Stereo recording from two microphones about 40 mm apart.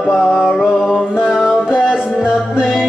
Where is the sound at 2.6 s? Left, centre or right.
Centre.